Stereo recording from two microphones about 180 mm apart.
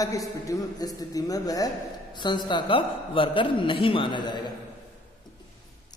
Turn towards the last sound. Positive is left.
turn(degrees=25)  # may be behind; listen again after turning